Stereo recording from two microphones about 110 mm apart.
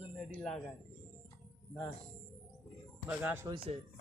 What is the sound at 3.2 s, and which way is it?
Speech, 20° right (ahead or behind).